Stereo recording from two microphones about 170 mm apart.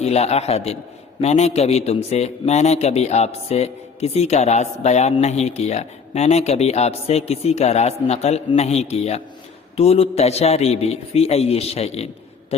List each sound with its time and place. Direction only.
0.0 s speech: 40° left (ahead or behind)